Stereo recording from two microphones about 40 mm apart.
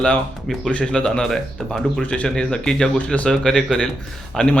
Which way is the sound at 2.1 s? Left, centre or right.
Left.